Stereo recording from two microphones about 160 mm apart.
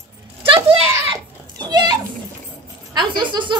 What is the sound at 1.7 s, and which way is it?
Speech, 25° right (ahead or behind).